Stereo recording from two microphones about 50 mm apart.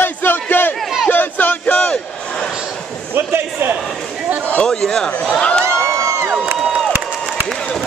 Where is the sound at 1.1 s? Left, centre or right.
Left.